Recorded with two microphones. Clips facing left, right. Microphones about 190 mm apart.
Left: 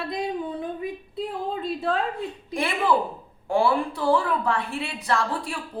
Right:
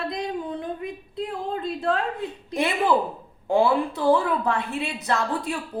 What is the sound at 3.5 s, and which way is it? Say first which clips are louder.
A woman's voice: right 2 dB; 20° right (ahead or behind).